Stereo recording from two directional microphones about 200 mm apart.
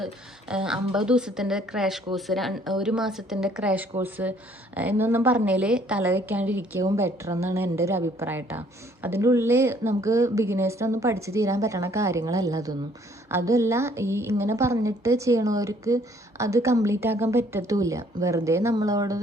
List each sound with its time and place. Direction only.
0.0 s a woman's voice: 5° right (ahead or behind)